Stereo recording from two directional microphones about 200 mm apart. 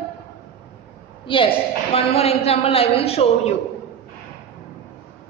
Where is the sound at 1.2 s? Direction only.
25° left (ahead or behind).